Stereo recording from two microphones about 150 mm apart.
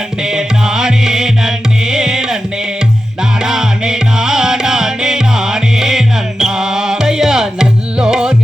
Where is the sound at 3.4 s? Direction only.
5° right (ahead or behind).